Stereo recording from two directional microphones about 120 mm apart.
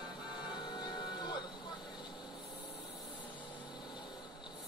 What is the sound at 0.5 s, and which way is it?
Music, 40° left (ahead or behind).